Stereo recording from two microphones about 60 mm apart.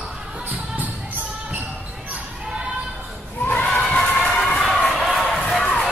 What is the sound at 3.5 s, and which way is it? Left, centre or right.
Crowd, left.